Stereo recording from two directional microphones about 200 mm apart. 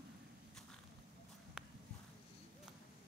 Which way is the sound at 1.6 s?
5° right (ahead or behind).